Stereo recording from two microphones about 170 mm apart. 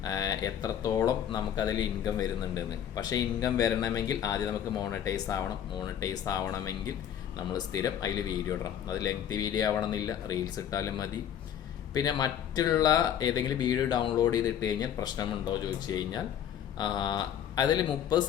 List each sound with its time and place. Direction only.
0.0 s speech: 25° left (ahead or behind)